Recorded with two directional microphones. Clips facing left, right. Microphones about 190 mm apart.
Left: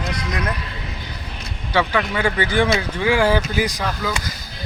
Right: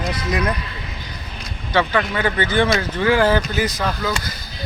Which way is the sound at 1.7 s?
10° left (ahead or behind).